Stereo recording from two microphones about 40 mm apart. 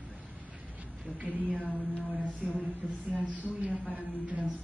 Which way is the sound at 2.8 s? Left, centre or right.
Left.